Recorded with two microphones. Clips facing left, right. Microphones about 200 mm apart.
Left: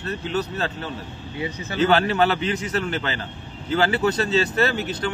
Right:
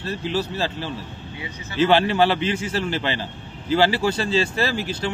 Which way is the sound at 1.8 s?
25° right (ahead or behind).